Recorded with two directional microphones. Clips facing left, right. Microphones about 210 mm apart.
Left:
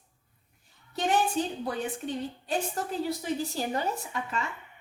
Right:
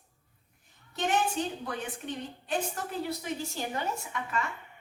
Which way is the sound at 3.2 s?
35° left (ahead or behind).